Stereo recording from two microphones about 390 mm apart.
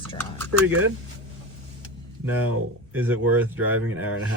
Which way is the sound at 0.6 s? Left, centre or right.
Right.